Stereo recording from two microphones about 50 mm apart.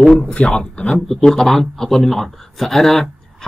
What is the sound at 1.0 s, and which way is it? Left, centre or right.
Speech, centre.